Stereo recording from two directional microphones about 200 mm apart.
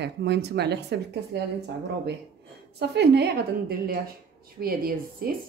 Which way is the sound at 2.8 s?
55° right (ahead or behind).